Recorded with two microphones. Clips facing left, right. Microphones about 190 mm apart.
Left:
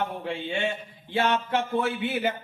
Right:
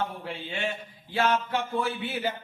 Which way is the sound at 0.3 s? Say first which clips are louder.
Left 4 dB; 25° left (ahead or behind).